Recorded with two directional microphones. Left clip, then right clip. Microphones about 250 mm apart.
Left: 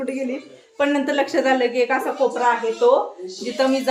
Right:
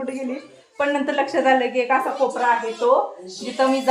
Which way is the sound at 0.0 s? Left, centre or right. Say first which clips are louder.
Left 2 dB; centre.